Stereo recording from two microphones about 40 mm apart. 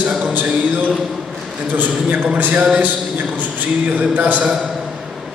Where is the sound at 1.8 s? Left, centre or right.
Right.